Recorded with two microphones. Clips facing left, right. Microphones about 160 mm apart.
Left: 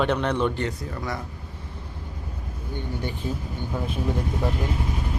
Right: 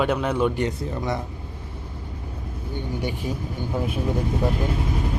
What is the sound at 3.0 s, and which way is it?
Speech, 15° right (ahead or behind).